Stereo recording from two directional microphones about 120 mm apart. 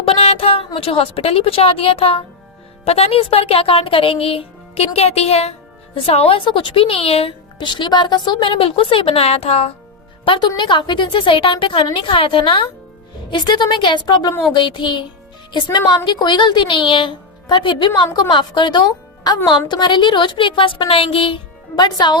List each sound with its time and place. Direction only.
0.0 s a sound: 55° left (ahead or behind)
0.8 s a woman's voice: 50° left (ahead or behind)
10.2 s a woman's voice: 40° left (ahead or behind)
16.0 s speech: 40° left (ahead or behind)